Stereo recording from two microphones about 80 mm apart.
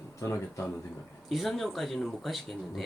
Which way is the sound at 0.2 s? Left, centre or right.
Left.